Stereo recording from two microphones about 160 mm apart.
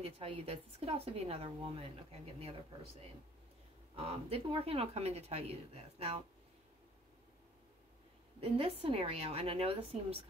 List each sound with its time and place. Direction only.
0.2 s speech: 40° right (ahead or behind)
3.9 s speech: 40° right (ahead or behind)
8.4 s speech: 35° right (ahead or behind)